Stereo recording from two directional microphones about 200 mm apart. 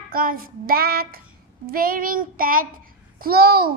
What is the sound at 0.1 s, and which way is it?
A child's voice, 45° right (ahead or behind).